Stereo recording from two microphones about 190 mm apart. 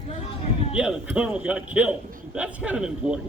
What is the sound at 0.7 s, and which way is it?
A man's voice, 5° right (ahead or behind).